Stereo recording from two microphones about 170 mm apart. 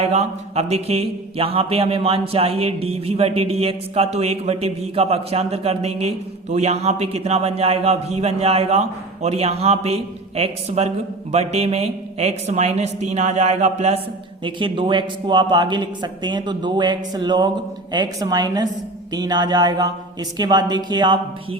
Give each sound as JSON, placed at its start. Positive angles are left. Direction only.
{"t": 0.0, "sound": "speech", "side_deg": -40}
{"t": 14.4, "sound": "speech", "side_deg": -30}